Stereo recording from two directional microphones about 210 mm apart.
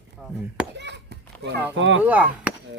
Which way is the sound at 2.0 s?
5° right (ahead or behind).